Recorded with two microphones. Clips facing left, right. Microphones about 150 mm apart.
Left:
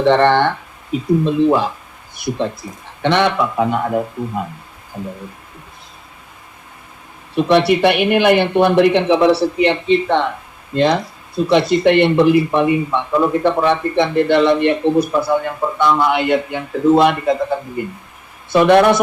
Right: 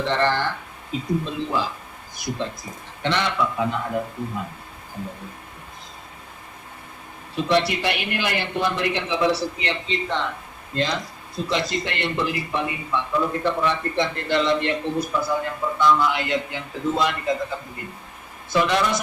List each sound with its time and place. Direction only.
0.0 s speech: 60° left (ahead or behind)
7.3 s speech: 65° left (ahead or behind)